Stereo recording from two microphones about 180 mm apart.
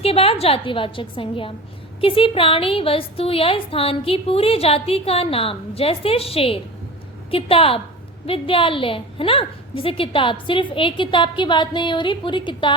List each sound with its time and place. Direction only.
0.0 s a woman's voice: 30° left (ahead or behind)